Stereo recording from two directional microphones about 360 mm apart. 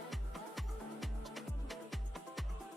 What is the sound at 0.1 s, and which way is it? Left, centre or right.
Music, centre.